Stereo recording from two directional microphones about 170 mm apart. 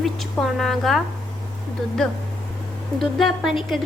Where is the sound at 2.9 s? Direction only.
Centre (ahead or behind).